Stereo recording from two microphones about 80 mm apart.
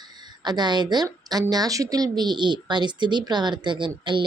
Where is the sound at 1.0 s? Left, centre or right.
Right.